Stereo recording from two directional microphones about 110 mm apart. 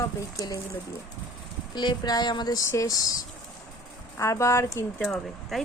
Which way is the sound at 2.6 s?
30° left (ahead or behind).